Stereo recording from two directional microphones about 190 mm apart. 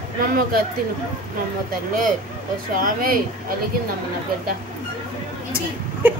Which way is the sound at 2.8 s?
50° right (ahead or behind).